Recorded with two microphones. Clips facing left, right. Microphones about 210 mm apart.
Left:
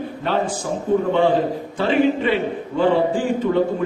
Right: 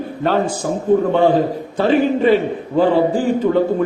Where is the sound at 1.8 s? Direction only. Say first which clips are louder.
Right 4 dB; 40° right (ahead or behind).